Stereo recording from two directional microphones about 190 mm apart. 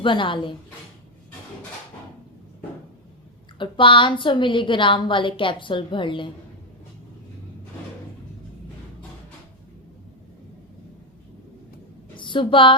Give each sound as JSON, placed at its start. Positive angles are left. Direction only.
{"t": 0.0, "sound": "a woman's voice", "side_deg": 25}
{"t": 3.6, "sound": "a woman's voice", "side_deg": 25}
{"t": 12.1, "sound": "a sound", "side_deg": 25}